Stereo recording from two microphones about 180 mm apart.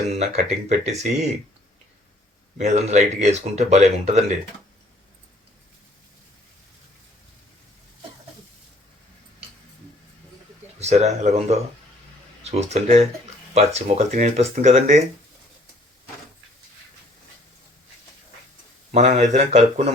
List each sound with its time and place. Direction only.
0.0 s speech: 35° right (ahead or behind)
2.6 s speech: 35° right (ahead or behind)
10.8 s speech: 40° right (ahead or behind)
18.9 s speech: 40° right (ahead or behind)